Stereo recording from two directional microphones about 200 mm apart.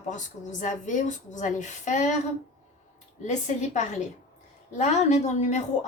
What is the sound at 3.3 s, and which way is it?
A woman's voice, 35° left (ahead or behind).